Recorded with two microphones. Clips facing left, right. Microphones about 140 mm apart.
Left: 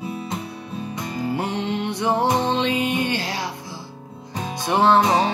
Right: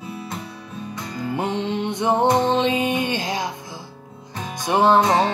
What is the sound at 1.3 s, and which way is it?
Music, 20° right (ahead or behind).